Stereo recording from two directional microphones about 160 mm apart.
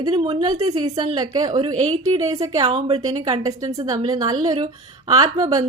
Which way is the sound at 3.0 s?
25° right (ahead or behind).